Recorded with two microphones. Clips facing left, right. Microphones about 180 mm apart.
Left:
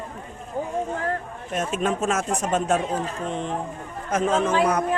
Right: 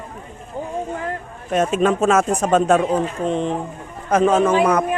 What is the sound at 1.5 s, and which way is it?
Speech, 90° right.